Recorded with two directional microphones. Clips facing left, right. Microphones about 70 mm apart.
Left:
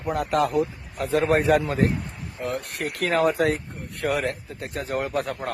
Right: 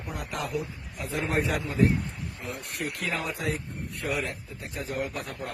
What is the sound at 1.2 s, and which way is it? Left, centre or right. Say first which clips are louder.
Speech: left 8 dB; left.